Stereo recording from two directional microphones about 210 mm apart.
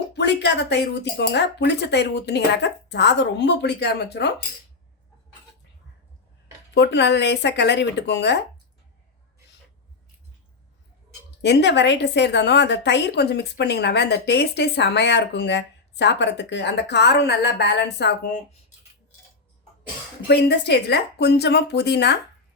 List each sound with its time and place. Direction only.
0.2 s speech: 55° left (ahead or behind)
6.7 s speech: 55° left (ahead or behind)
11.4 s a woman's voice: 55° left (ahead or behind)
20.2 s a woman's voice: 50° left (ahead or behind)